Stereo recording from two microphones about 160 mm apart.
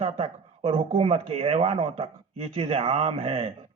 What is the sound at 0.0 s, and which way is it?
A woman's voice, 40° right (ahead or behind).